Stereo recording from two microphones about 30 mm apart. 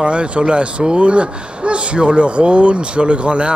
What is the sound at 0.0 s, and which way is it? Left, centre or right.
Speech, right.